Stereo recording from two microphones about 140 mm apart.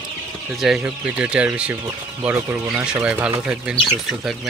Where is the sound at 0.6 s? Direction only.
Centre (ahead or behind).